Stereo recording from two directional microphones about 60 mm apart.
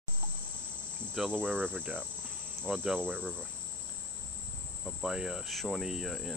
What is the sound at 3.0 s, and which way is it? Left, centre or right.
Cricket, right.